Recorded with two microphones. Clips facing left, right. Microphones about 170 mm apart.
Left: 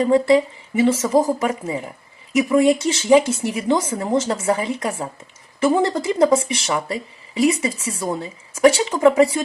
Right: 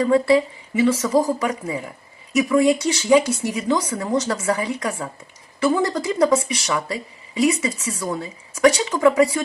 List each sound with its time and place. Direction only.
0.0 s speech: 20° left (ahead or behind)